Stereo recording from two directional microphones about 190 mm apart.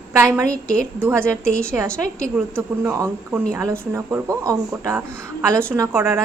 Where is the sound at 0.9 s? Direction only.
10° right (ahead or behind).